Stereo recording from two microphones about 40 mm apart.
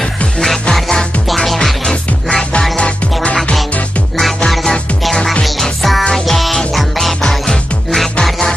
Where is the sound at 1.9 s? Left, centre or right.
Centre.